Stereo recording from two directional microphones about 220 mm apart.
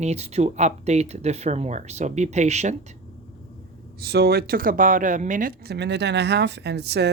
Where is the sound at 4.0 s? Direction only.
45° right (ahead or behind).